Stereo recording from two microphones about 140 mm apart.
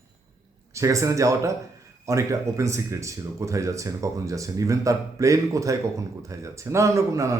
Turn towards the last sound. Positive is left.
turn(degrees=-20)  # may be behind; listen again after turning